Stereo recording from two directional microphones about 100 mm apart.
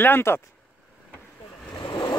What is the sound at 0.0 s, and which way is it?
Speech, 20° left (ahead or behind).